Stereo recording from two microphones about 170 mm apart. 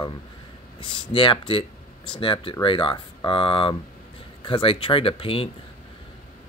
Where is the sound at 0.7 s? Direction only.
30° left (ahead or behind).